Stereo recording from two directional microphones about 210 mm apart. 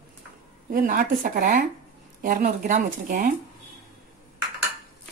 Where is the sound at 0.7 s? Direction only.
40° right (ahead or behind).